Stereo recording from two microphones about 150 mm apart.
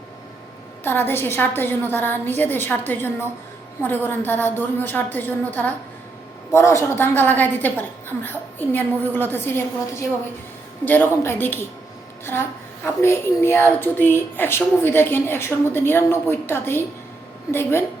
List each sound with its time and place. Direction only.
0.9 s a woman's voice: 15° left (ahead or behind)